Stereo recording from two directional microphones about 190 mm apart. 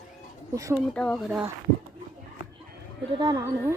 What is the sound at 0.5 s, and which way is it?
Speech, 15° right (ahead or behind).